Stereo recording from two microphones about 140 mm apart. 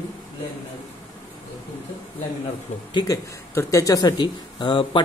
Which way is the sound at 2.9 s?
25° left (ahead or behind).